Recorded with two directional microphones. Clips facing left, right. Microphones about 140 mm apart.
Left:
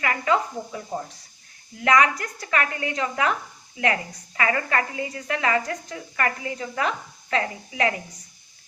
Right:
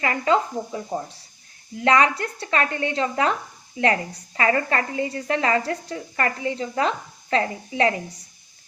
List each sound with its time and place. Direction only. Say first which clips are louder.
0.0 s a woman's voice: right 2 dB; 30° right (ahead or behind)